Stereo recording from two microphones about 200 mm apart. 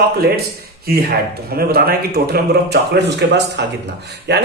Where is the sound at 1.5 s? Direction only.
50° right (ahead or behind).